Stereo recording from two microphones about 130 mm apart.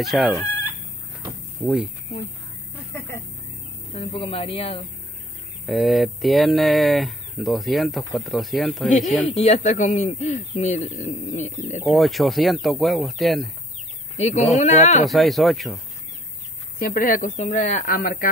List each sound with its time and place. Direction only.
0.0 s speech: centre (ahead or behind)
1.6 s speech: 5° right (ahead or behind)
2.7 s a sound: 15° left (ahead or behind)
3.9 s speech: 45° left (ahead or behind)
5.7 s speech: centre (ahead or behind)
9.4 s speech: 55° left (ahead or behind)
11.8 s speech: centre (ahead or behind)
14.1 s speech: 60° left (ahead or behind)
15.0 s speech: centre (ahead or behind)
16.8 s speech: 90° left